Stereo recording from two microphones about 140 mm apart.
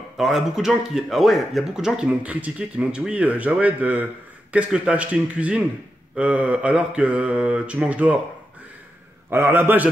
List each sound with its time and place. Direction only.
0.2 s speech: centre (ahead or behind)
9.3 s speech: 15° right (ahead or behind)